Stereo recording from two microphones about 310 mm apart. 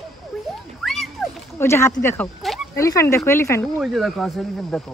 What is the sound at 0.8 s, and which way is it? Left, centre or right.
Speech, centre.